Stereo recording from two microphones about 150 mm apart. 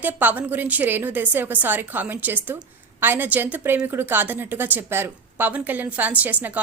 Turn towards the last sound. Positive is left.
turn(degrees=-10)  # may be behind; listen again after turning